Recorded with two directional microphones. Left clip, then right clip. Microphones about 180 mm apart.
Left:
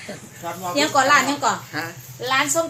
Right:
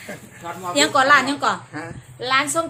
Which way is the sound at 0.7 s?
5° right (ahead or behind).